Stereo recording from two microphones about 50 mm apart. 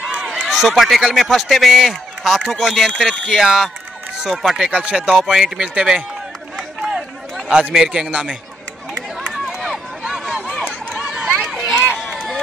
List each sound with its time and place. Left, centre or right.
0.0 s run: centre
0.4 s speech: centre
4.6 s speech: centre
6.8 s run: centre
7.7 s speech: centre
8.1 s speech: right
9.3 s run: centre